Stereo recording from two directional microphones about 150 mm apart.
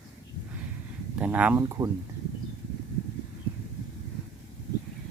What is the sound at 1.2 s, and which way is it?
Speech, 10° right (ahead or behind).